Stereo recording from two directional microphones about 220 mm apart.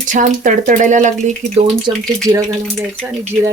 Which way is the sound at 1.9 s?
20° right (ahead or behind).